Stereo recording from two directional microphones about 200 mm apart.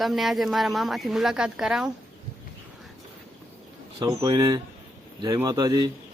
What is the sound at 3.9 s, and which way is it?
A man's voice, 20° right (ahead or behind).